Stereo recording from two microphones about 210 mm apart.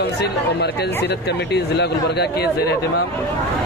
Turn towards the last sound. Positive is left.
turn(degrees=50)  # may be behind; listen again after turning